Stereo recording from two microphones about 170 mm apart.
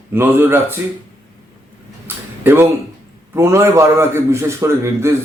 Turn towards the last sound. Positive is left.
turn(degrees=-15)  # may be behind; listen again after turning